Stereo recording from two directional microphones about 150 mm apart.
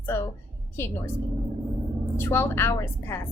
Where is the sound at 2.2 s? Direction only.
15° left (ahead or behind).